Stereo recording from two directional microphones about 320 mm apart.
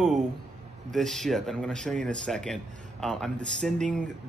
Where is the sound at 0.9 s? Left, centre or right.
Centre.